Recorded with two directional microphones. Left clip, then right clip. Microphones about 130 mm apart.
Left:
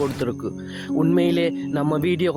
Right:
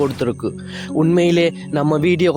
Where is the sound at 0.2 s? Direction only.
35° right (ahead or behind).